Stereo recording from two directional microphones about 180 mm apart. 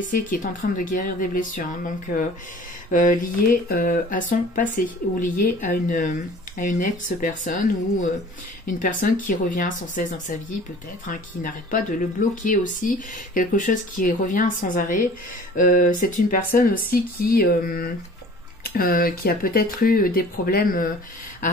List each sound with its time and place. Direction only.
0.0 s speech: 50° left (ahead or behind)
2.9 s speech: 45° left (ahead or behind)